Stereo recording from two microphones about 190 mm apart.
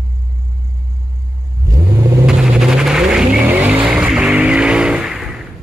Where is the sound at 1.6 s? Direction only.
15° right (ahead or behind).